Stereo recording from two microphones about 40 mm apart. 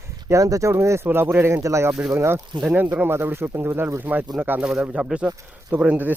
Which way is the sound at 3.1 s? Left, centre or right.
Right.